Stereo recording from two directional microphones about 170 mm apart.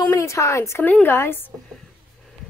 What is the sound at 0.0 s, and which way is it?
A woman's voice, 15° left (ahead or behind).